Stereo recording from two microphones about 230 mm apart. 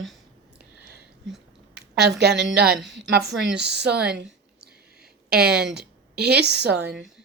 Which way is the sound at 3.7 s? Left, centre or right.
Right.